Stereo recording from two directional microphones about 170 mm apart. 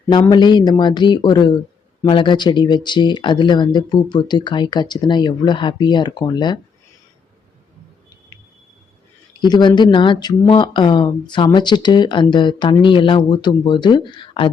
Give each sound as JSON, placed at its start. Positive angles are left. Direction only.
{"t": 0.1, "sound": "speech", "side_deg": 25}
{"t": 9.4, "sound": "speech", "side_deg": 25}